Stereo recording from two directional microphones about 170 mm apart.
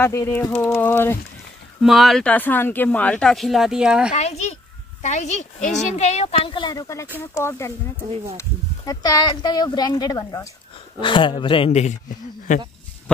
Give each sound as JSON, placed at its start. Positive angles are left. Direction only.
{"t": 0.0, "sound": "pigeon", "side_deg": 15}
{"t": 1.8, "sound": "speech", "side_deg": 0}
{"t": 4.1, "sound": "speech", "side_deg": 40}
{"t": 7.3, "sound": "pigeon", "side_deg": 15}
{"t": 8.4, "sound": "speech", "side_deg": 20}